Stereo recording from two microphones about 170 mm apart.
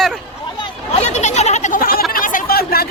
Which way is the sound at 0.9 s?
40° left (ahead or behind).